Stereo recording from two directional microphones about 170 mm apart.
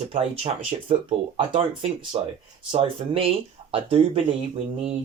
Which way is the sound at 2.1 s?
30° right (ahead or behind).